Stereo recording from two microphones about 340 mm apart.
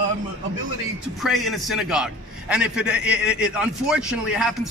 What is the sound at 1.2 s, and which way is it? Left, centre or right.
A man's voice, centre.